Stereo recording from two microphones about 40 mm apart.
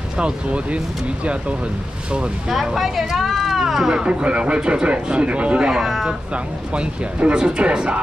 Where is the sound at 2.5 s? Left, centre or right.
Centre.